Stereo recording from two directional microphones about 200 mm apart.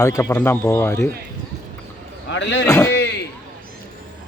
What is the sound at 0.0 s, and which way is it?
Speech, 15° left (ahead or behind).